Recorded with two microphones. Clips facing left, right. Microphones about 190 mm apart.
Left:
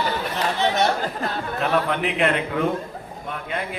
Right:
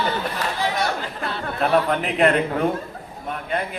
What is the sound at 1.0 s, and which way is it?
Speech, 45° left (ahead or behind).